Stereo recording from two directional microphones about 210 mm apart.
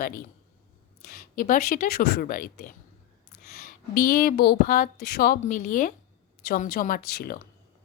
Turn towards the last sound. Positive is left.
turn(degrees=45)  # may be behind; listen again after turning